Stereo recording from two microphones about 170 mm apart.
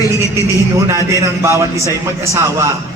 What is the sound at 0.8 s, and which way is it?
Speech, 15° right (ahead or behind).